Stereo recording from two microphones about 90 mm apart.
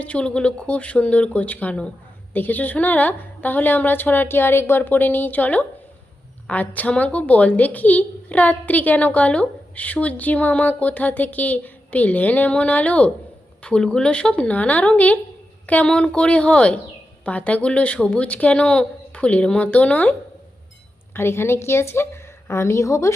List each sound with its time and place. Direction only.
0.0 s a woman's voice: 15° left (ahead or behind)
21.1 s a woman's voice: 25° left (ahead or behind)